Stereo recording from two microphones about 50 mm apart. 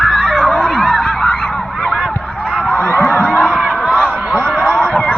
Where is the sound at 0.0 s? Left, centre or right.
Centre.